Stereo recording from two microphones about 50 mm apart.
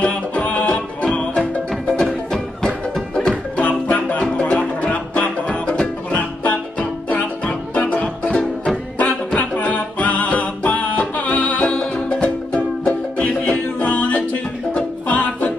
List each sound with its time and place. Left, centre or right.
0.0 s music: left
3.2 s music: centre
3.6 s music: left
8.9 s music: left